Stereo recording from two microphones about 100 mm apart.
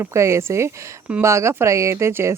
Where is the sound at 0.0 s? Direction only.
30° right (ahead or behind).